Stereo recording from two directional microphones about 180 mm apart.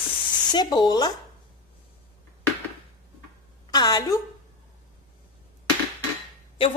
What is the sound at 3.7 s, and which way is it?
Speech, 20° left (ahead or behind).